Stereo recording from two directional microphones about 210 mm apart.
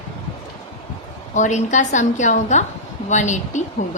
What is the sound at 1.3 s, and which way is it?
A woman's voice, 35° left (ahead or behind).